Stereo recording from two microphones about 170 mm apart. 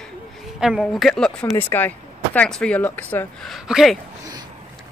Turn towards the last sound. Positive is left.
turn(degrees=-5)  # may be behind; listen again after turning